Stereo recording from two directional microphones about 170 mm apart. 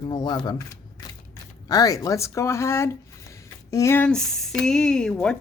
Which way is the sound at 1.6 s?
20° left (ahead or behind).